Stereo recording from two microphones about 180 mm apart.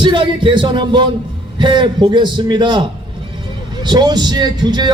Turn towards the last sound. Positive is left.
turn(degrees=-25)  # may be behind; listen again after turning